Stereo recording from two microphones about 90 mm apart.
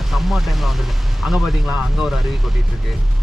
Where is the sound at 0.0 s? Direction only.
Centre (ahead or behind).